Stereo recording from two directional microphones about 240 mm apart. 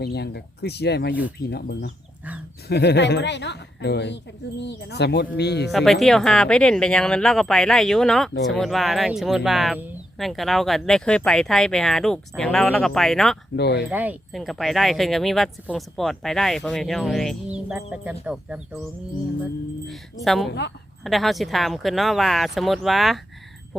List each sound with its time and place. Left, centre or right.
0.0 s a woman's voice: left
5.7 s speech: centre
13.6 s a woman's voice: left
13.9 s speech: centre
20.2 s speech: centre
20.5 s a woman's voice: left
21.0 s speech: centre